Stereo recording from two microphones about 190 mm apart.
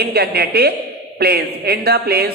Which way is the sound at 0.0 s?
55° right (ahead or behind).